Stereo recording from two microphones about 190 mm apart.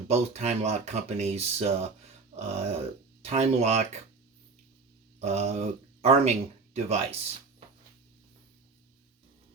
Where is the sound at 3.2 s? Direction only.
35° right (ahead or behind).